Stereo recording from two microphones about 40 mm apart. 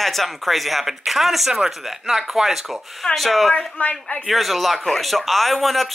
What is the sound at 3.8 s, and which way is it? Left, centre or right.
Speech, left.